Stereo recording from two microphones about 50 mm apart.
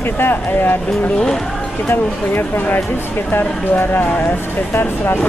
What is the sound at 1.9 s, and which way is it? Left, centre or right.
Speech, left.